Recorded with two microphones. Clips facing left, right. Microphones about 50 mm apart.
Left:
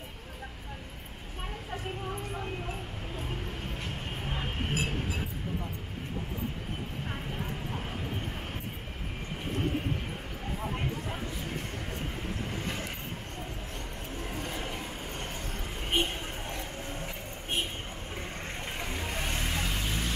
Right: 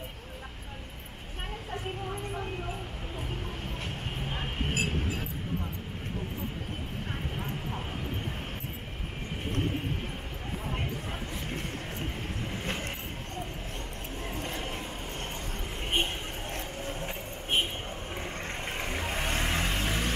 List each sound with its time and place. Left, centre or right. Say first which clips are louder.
15.8 s a sound: even; centre
17.0 s vehicle: right 2 dB; right
18.1 s vehicle: right 1 dB; centre
18.7 s vehicle: right 3 dB; right